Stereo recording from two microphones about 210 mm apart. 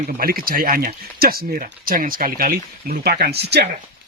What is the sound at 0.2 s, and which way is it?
Speech, 45° right (ahead or behind).